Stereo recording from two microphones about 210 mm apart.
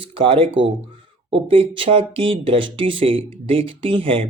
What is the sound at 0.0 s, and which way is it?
Speech, 25° right (ahead or behind).